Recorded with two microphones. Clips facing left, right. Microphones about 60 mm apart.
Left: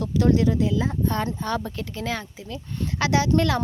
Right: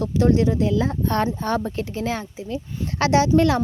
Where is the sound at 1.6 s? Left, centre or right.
Right.